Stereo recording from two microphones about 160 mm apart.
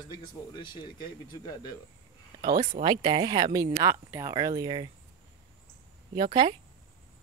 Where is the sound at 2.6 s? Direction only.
35° right (ahead or behind).